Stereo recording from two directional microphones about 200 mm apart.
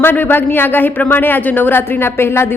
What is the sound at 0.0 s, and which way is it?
A woman's voice, 10° left (ahead or behind).